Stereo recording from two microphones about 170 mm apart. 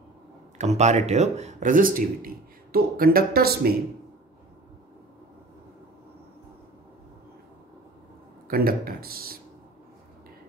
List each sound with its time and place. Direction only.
0.6 s speech: 40° right (ahead or behind); by 3.7 s 65° right (ahead or behind)
8.5 s speech: 60° right (ahead or behind)